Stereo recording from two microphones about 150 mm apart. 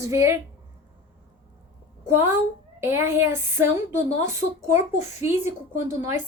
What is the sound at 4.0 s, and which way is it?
Speech, 50° left (ahead or behind).